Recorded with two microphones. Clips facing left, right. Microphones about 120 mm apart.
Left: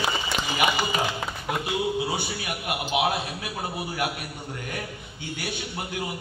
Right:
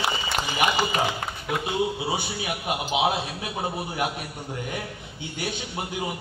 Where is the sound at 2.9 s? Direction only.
20° right (ahead or behind).